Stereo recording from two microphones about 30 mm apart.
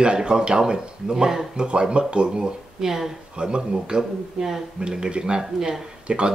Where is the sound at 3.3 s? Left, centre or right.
Right.